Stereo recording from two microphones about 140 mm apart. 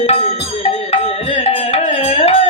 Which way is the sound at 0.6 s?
45° left (ahead or behind).